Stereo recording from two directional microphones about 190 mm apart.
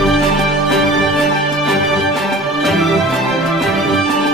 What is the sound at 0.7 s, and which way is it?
Music, centre (ahead or behind).